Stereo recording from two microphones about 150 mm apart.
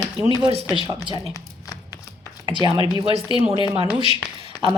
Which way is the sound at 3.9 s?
25° left (ahead or behind).